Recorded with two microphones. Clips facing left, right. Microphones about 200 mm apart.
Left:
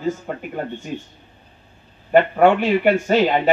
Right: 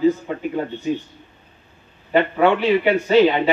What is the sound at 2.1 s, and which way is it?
Speech, 50° left (ahead or behind).